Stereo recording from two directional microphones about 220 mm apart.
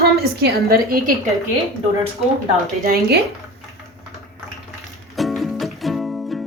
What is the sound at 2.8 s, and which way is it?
Speech, 45° right (ahead or behind).